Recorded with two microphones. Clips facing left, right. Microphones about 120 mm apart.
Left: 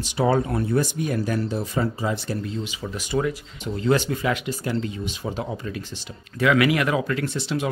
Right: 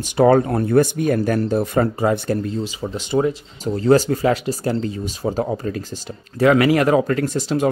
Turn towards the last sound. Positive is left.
turn(degrees=-40)  # may be behind; listen again after turning